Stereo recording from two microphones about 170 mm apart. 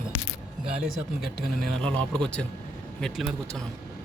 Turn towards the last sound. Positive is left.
turn(degrees=0)  # may be behind; listen again after turning